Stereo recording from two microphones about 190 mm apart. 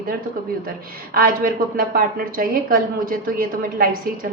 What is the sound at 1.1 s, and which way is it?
A woman's voice, 50° right (ahead or behind).